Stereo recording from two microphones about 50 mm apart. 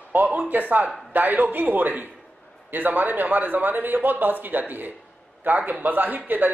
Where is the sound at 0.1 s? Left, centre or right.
Right.